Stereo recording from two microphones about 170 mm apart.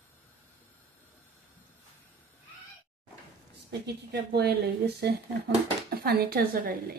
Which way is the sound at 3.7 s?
75° right (ahead or behind).